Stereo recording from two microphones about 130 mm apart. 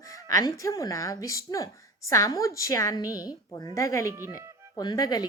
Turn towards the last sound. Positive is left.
turn(degrees=30)  # may be behind; listen again after turning